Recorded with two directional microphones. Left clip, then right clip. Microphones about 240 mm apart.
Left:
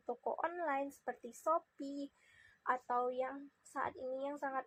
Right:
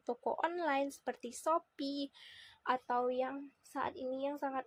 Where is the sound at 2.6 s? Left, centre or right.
Right.